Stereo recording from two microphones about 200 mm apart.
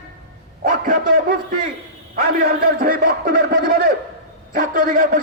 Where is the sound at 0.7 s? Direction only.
40° right (ahead or behind).